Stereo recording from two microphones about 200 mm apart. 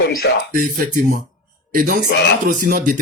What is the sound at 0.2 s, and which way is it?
Speech, 50° left (ahead or behind).